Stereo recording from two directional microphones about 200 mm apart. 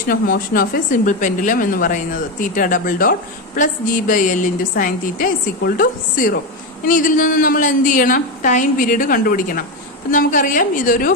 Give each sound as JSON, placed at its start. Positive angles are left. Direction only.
{"t": 0.1, "sound": "a woman's voice", "side_deg": 45}